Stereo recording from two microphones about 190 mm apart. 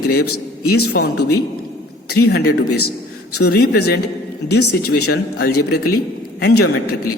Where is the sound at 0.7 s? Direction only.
55° left (ahead or behind).